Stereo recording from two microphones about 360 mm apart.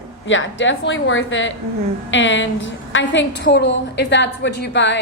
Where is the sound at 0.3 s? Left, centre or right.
Left.